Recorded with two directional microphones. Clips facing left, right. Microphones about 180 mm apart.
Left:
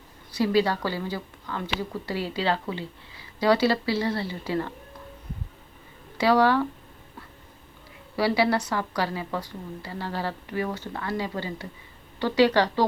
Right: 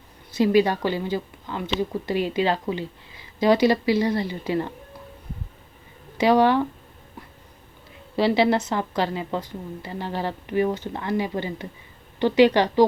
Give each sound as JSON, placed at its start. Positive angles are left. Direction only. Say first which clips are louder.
{"t": 0.3, "sound": "a woman's voice", "louder": "right 4 dB", "side_deg": -20}
{"t": 6.1, "sound": "a woman's voice", "louder": "right 3 dB", "side_deg": -20}
{"t": 8.1, "sound": "a woman's voice", "louder": "right 3 dB", "side_deg": -20}